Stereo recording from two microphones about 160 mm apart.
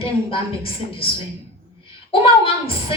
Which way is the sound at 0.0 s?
35° left (ahead or behind).